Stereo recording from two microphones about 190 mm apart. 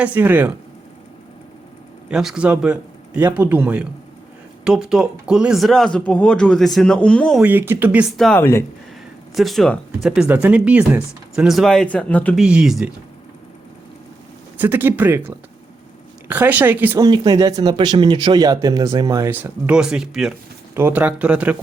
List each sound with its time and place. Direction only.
0.0 s speech: 10° right (ahead or behind)
2.0 s speech: 5° right (ahead or behind)
7.4 s speech: 10° right (ahead or behind); by 8.6 s 10° left (ahead or behind)
9.3 s speech: centre (ahead or behind)
14.6 s speech: 10° right (ahead or behind)
17.1 s speech: 20° right (ahead or behind)